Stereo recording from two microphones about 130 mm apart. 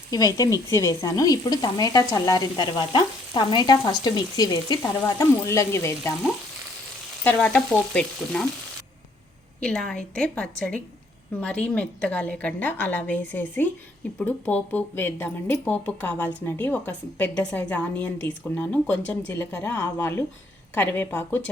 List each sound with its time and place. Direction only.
0.1 s stir: 30° left (ahead or behind)
7.3 s a woman's voice: 10° left (ahead or behind)
9.6 s a woman's voice: 5° left (ahead or behind)